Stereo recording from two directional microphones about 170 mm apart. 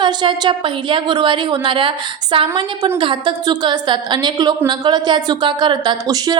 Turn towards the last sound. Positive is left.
turn(degrees=-25)  # may be behind; listen again after turning